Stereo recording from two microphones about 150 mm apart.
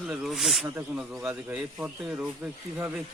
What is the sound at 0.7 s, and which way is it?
Speech, 15° right (ahead or behind).